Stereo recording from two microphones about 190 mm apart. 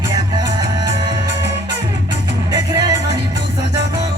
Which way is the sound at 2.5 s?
20° right (ahead or behind).